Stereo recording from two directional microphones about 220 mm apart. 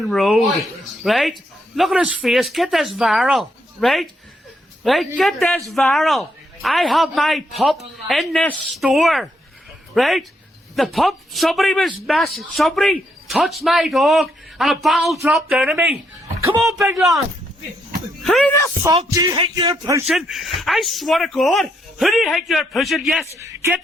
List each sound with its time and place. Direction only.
0.0 s speech: centre (ahead or behind)
16.4 s speech: 15° right (ahead or behind)
18.2 s speech: 5° left (ahead or behind)
19.1 s speech: 20° right (ahead or behind)
20.1 s speech: centre (ahead or behind)